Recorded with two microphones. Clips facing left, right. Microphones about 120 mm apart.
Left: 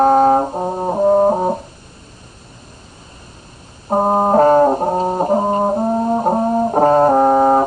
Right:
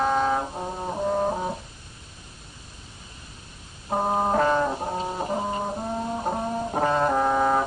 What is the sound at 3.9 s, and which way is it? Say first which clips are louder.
Brass instrument: left 9 dB; 40° left (ahead or behind).